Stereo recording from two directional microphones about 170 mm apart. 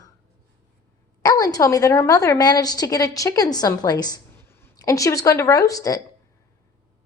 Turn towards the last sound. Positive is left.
turn(degrees=20)  # may be behind; listen again after turning